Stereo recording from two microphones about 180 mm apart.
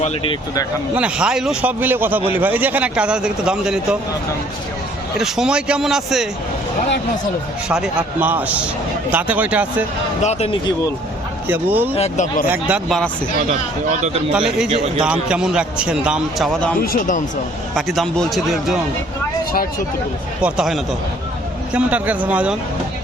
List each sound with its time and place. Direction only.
0.0 s speech: 30° left (ahead or behind)
0.9 s a man's voice: 5° right (ahead or behind)
5.2 s a man's voice: 5° right (ahead or behind)
7.7 s a man's voice: 5° right (ahead or behind)
10.2 s speech: 35° left (ahead or behind)
11.4 s a man's voice: 10° right (ahead or behind)
11.9 s speech: 40° left (ahead or behind)
12.5 s a man's voice: 5° right (ahead or behind)
14.3 s a man's voice: 5° right (ahead or behind)
16.8 s speech: 50° left (ahead or behind)
17.7 s a man's voice: centre (ahead or behind)
20.4 s a man's voice: 5° right (ahead or behind)